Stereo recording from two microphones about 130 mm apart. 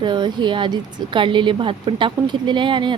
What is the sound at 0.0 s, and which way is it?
A woman's voice, 35° right (ahead or behind).